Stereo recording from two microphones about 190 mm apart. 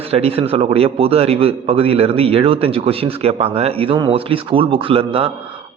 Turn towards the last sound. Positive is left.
turn(degrees=-30)  # may be behind; listen again after turning